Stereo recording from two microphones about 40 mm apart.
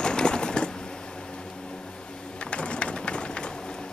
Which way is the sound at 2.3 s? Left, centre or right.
Left.